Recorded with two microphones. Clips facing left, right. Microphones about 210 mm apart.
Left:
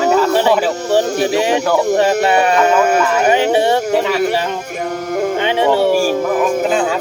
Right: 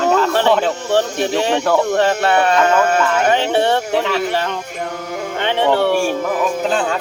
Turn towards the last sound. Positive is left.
turn(degrees=5)  # may be behind; listen again after turning